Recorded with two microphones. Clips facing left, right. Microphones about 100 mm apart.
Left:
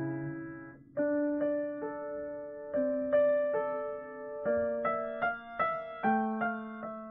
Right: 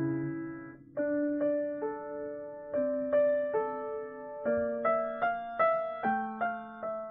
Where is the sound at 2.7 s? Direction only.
Centre (ahead or behind); by 6.1 s 20° right (ahead or behind).